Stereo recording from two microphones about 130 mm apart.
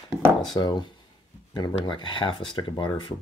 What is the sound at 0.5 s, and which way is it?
Speech, 30° left (ahead or behind).